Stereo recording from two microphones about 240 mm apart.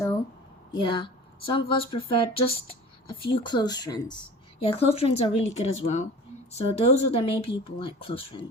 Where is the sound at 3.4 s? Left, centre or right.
Centre.